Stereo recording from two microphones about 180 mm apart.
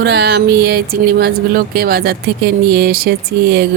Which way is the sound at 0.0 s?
70° right (ahead or behind).